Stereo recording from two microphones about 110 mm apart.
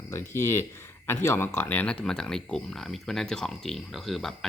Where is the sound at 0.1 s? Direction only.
25° left (ahead or behind).